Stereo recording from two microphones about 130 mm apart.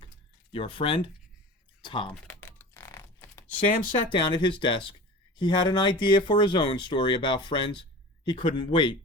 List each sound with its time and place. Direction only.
0.5 s speech: 40° left (ahead or behind)
2.2 s typing: 15° left (ahead or behind)
3.9 s speech: 40° left (ahead or behind)